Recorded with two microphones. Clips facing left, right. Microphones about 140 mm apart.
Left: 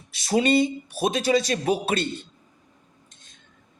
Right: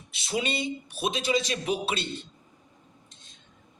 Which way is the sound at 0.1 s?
40° left (ahead or behind).